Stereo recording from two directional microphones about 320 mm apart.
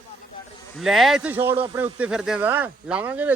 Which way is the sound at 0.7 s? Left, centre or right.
Centre.